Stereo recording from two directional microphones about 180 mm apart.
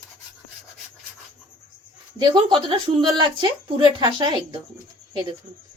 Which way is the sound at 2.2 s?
25° right (ahead or behind).